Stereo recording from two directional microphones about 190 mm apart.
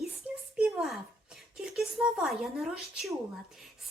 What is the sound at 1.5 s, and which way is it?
Speech, centre (ahead or behind).